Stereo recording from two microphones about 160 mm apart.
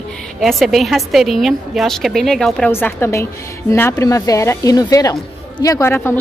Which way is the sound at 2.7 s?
15° left (ahead or behind).